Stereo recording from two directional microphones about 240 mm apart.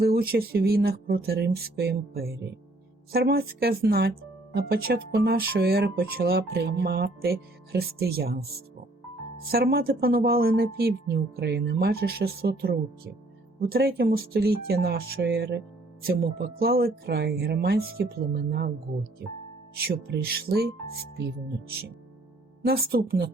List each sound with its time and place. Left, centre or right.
0.0 s speech: right
9.5 s speech: right
19.7 s speech: right
22.6 s speech: right